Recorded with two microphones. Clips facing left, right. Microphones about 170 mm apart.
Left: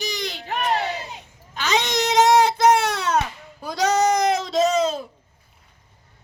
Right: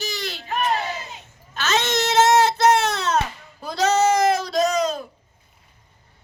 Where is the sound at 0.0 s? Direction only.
15° left (ahead or behind).